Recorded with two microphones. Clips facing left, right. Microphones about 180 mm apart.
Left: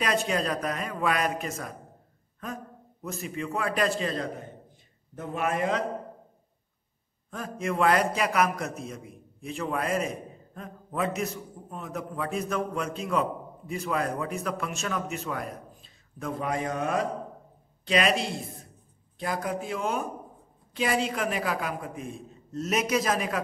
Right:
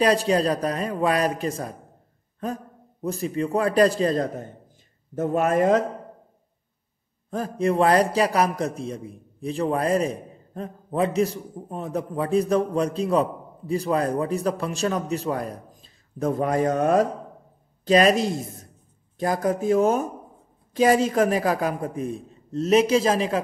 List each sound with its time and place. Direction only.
0.0 s a man's voice: 35° right (ahead or behind)
7.2 s a man's voice: 35° right (ahead or behind)